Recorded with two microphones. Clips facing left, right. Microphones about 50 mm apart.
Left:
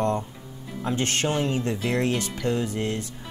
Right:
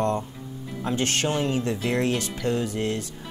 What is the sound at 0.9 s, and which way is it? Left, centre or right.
Speech, left.